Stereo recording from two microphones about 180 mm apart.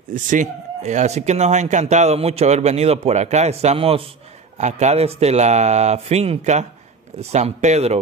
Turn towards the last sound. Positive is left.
turn(degrees=-40)  # may be behind; listen again after turning